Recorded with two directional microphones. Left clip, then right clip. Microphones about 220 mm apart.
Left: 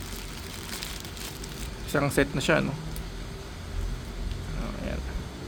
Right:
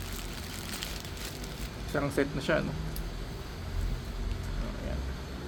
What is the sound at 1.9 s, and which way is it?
Speech, 40° left (ahead or behind).